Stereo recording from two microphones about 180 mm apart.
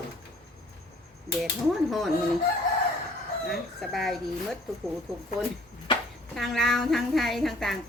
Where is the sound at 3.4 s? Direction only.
Centre (ahead or behind).